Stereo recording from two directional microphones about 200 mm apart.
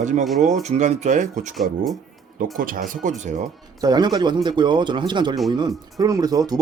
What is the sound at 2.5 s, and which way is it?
Speech, 45° right (ahead or behind).